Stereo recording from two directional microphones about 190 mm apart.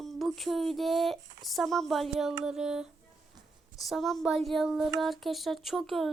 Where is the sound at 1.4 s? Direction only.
Centre (ahead or behind).